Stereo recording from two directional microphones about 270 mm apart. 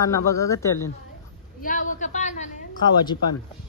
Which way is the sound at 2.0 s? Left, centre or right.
Left.